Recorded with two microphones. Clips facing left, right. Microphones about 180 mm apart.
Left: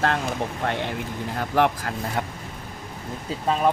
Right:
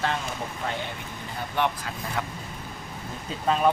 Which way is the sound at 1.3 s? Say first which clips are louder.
Left 6 dB; 90° left.